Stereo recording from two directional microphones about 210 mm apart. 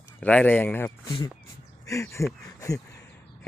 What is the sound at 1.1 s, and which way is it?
Speech, 20° left (ahead or behind).